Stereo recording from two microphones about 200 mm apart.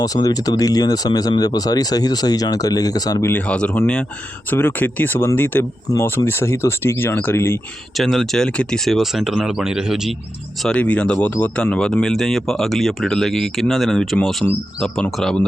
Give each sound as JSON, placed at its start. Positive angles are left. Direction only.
{"t": 0.0, "sound": "speech", "side_deg": 20}
{"t": 7.9, "sound": "speech", "side_deg": 0}